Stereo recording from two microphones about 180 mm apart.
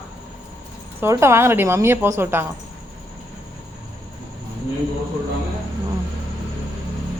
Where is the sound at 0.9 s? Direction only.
15° right (ahead or behind).